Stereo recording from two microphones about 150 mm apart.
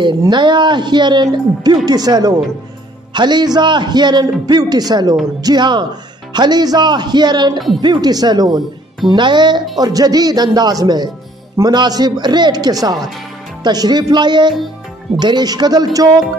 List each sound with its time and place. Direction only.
0.2 s a man's voice: 30° right (ahead or behind)